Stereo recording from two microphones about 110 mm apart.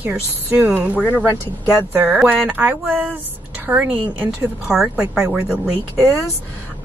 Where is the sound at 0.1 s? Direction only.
15° right (ahead or behind).